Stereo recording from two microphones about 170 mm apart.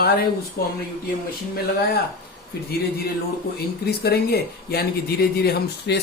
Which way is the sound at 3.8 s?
65° left (ahead or behind).